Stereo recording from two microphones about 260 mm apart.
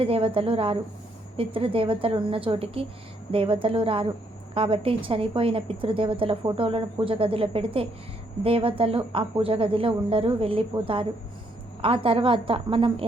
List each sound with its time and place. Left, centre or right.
0.0 s a woman's voice: right